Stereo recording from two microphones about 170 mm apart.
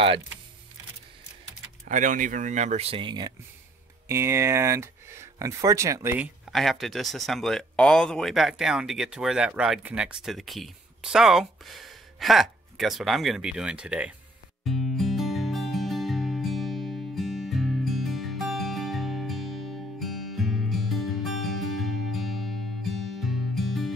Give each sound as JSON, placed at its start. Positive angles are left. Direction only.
{"t": 1.9, "sound": "speech", "side_deg": -50}
{"t": 4.1, "sound": "speech", "side_deg": -15}
{"t": 6.1, "sound": "speech", "side_deg": 0}
{"t": 14.6, "sound": "music", "side_deg": 0}